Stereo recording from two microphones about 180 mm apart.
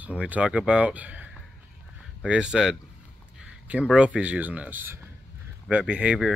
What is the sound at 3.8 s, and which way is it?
Speech, 5° right (ahead or behind).